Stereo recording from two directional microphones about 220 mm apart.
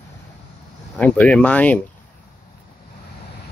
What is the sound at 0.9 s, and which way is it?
Speech, 5° left (ahead or behind).